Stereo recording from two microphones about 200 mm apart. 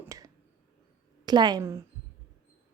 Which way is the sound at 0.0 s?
15° right (ahead or behind).